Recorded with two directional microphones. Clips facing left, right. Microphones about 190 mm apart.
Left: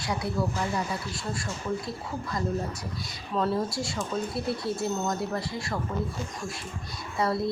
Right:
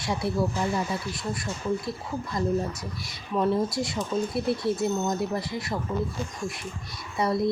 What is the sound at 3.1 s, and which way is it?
A woman's voice, 20° right (ahead or behind).